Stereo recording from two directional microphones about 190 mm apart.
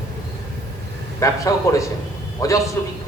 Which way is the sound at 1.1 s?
15° left (ahead or behind).